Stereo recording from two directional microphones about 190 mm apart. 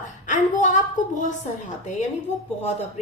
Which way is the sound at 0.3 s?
40° left (ahead or behind).